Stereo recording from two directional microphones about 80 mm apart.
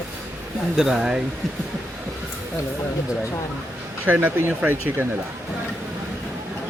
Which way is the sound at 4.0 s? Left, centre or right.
Right.